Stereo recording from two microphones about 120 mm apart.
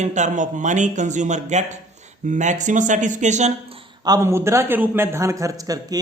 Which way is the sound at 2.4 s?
90° right.